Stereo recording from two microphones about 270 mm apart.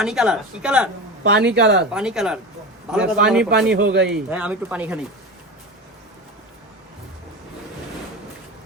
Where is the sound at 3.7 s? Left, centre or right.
Right.